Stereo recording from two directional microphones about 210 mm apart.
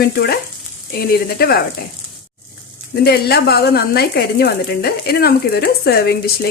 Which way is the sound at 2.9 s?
50° left (ahead or behind).